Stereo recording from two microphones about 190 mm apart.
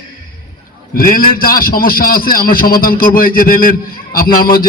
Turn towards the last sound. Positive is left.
turn(degrees=50)  # may be behind; listen again after turning